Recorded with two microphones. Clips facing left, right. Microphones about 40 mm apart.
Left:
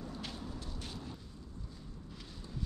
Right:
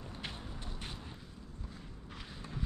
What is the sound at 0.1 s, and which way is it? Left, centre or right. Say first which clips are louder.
Vehicle: left 1 dB; right.